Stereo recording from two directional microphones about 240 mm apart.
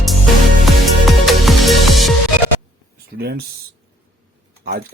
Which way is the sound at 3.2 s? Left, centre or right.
Right.